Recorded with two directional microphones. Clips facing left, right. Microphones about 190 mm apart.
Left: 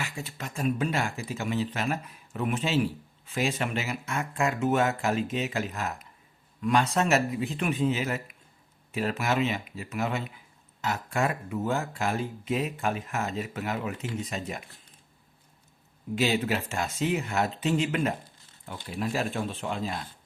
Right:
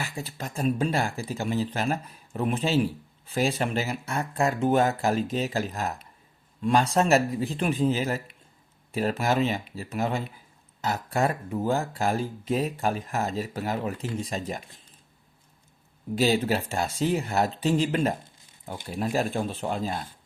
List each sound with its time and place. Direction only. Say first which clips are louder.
0.0 s speech: right 2 dB; 35° right (ahead or behind)
16.1 s speech: right 3 dB; 35° right (ahead or behind)